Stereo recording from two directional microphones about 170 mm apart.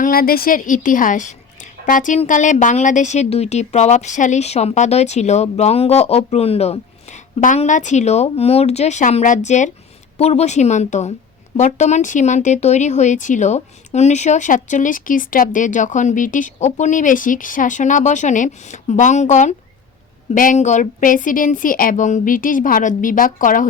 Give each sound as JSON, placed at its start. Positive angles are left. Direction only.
{"t": 0.0, "sound": "a woman's voice", "side_deg": 60}